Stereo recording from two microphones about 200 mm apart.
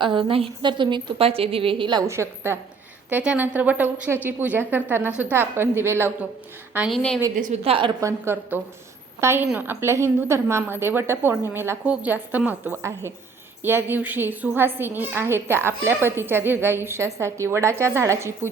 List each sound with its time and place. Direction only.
0.0 s a woman's voice: 25° right (ahead or behind)
6.7 s a woman's voice: centre (ahead or behind)
7.3 s a woman's voice: 35° right (ahead or behind)
8.2 s a woman's voice: 10° right (ahead or behind)